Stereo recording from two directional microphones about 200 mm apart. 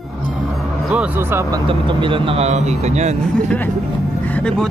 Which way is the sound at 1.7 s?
25° right (ahead or behind).